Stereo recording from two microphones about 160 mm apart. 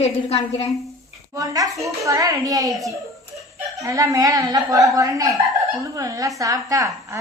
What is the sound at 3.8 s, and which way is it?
A woman's voice, 20° right (ahead or behind).